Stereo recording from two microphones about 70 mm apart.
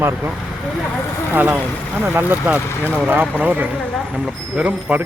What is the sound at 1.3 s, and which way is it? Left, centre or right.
Speech, right.